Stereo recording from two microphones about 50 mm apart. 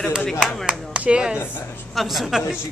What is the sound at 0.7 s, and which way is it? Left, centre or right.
Speech, right.